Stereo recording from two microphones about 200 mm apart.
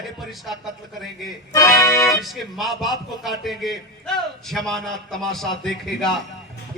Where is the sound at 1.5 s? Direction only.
15° left (ahead or behind).